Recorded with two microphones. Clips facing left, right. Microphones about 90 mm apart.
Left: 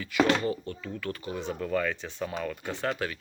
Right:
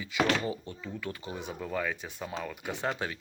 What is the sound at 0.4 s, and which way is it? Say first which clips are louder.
Speech: left 4 dB; 10° right (ahead or behind).